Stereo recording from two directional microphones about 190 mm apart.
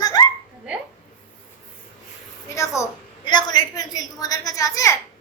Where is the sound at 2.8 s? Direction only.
15° left (ahead or behind).